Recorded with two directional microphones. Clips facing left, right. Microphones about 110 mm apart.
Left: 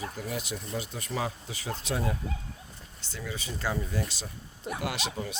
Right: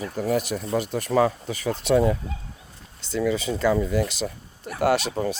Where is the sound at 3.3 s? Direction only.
90° right.